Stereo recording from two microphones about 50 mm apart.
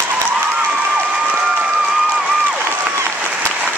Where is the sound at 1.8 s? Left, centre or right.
Right.